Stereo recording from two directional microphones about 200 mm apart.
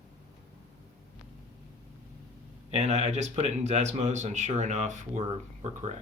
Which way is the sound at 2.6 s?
35° right (ahead or behind).